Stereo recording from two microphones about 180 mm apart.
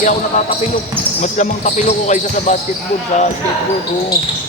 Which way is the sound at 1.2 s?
40° left (ahead or behind).